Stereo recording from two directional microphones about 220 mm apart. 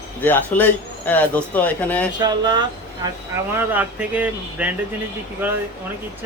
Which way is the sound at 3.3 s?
10° right (ahead or behind).